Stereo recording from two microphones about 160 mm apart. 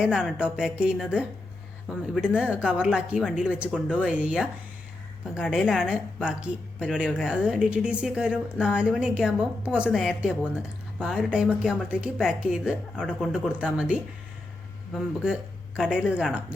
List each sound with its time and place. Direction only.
0.0 s a woman's voice: 5° right (ahead or behind)
15.2 s speech: 5° right (ahead or behind)